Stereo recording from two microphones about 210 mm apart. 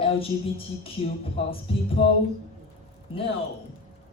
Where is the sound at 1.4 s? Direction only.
30° left (ahead or behind).